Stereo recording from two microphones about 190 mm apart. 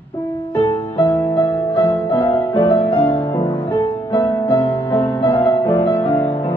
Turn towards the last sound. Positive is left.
turn(degrees=10)  # may be behind; listen again after turning